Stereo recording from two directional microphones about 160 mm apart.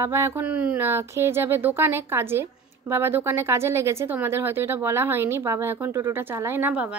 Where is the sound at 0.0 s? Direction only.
15° right (ahead or behind).